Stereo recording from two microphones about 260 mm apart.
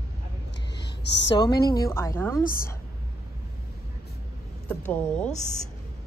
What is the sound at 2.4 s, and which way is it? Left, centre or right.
Speech, left.